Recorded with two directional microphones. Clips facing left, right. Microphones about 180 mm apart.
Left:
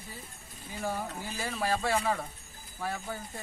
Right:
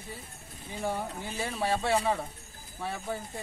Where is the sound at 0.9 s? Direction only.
25° right (ahead or behind).